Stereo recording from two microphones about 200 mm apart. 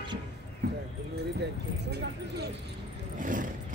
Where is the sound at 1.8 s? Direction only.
55° right (ahead or behind).